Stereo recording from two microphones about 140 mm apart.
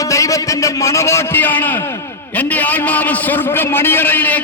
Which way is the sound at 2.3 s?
10° left (ahead or behind).